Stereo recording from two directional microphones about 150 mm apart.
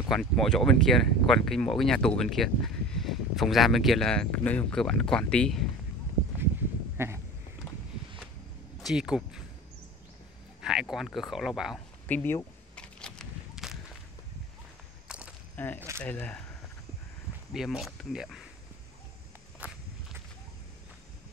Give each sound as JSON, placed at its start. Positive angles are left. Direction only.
{"t": 0.1, "sound": "speech", "side_deg": 5}
{"t": 7.0, "sound": "a sound", "side_deg": -15}
{"t": 8.8, "sound": "speech", "side_deg": -5}
{"t": 10.6, "sound": "speech", "side_deg": -5}
{"t": 12.1, "sound": "speech", "side_deg": 10}
{"t": 12.7, "sound": "a sound", "side_deg": 5}
{"t": 15.0, "sound": "a sound", "side_deg": -5}
{"t": 15.5, "sound": "speech", "side_deg": 10}
{"t": 17.5, "sound": "speech", "side_deg": 0}
{"t": 19.6, "sound": "walk", "side_deg": -10}